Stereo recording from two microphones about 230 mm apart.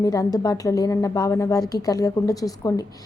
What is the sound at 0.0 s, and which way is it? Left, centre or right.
A woman's voice, centre.